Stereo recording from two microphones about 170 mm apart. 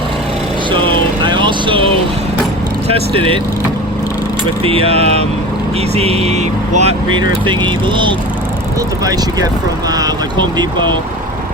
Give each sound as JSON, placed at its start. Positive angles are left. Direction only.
{"t": 0.7, "sound": "vehicle", "side_deg": -30}
{"t": 2.9, "sound": "speech", "side_deg": -30}
{"t": 4.6, "sound": "speech", "side_deg": -35}
{"t": 7.1, "sound": "speech", "side_deg": -30}
{"t": 9.9, "sound": "speech", "side_deg": -25}